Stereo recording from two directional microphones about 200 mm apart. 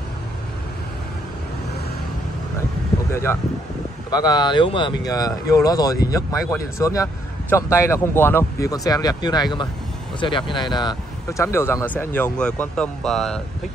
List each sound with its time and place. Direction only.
3.1 s a man's voice: 15° left (ahead or behind)